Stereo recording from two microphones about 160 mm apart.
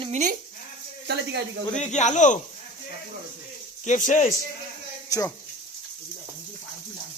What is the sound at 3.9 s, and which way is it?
Speech, 50° left (ahead or behind).